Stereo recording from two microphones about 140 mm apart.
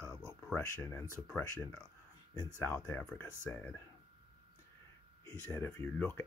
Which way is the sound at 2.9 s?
15° left (ahead or behind).